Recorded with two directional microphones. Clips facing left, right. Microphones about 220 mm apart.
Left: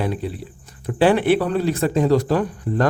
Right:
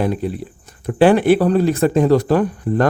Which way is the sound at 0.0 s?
45° right (ahead or behind).